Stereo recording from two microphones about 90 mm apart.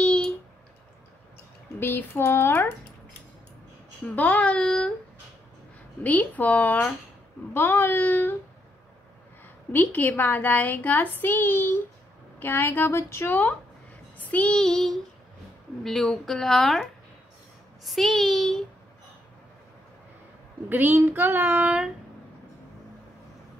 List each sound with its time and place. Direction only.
0.0 s a sound: 10° left (ahead or behind)
1.8 s a woman's voice: 25° left (ahead or behind)
4.1 s child singing: 15° left (ahead or behind)
6.0 s child singing: 15° left (ahead or behind)
7.5 s a woman's voice: 20° left (ahead or behind)
9.7 s a woman's voice: 20° left (ahead or behind)
14.1 s child singing: 15° left (ahead or behind)
15.8 s speech: 5° left (ahead or behind)
20.7 s child singing: 25° right (ahead or behind)
21.6 s a sound: 10° right (ahead or behind)